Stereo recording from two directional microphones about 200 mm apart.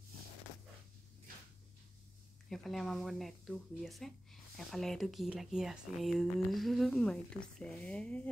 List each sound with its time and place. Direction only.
2.5 s speech: centre (ahead or behind)